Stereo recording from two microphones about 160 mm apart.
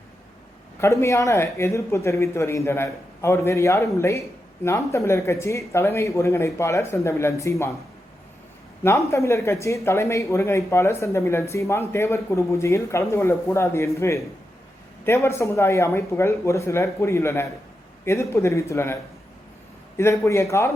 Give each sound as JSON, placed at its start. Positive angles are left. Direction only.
{"t": 0.8, "sound": "speech", "side_deg": 20}
{"t": 8.8, "sound": "speech", "side_deg": 15}
{"t": 20.0, "sound": "speech", "side_deg": 15}